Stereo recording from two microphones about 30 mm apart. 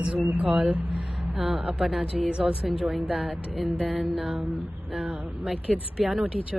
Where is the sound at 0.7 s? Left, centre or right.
Right.